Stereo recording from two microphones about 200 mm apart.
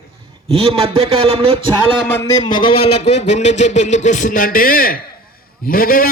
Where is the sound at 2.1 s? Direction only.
15° left (ahead or behind).